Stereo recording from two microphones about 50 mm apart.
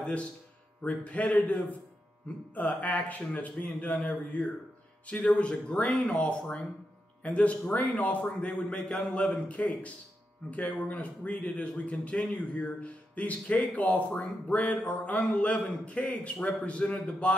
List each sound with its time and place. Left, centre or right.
0.0 s a man's voice: left